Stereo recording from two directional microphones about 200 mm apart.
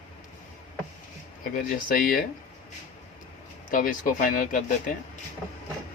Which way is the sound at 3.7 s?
40° left (ahead or behind).